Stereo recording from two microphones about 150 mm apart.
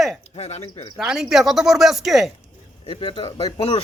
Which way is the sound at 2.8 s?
30° left (ahead or behind).